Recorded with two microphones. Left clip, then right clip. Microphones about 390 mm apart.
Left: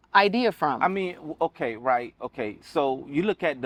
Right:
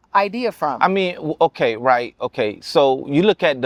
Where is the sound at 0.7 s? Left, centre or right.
Right.